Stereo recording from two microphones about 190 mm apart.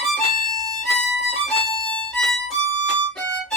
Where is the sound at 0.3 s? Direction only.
50° left (ahead or behind).